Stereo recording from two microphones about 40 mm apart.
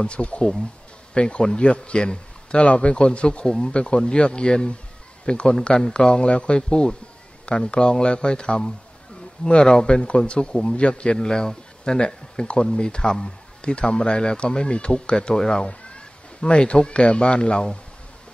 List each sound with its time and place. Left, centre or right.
0.0 s a man's voice: left
3.7 s speech: left
5.8 s speech: centre
6.0 s speech: left
11.1 s speech: centre
15.6 s speech: left